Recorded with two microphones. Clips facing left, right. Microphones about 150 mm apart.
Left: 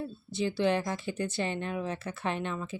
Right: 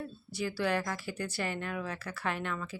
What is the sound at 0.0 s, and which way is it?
A woman's voice, 25° left (ahead or behind).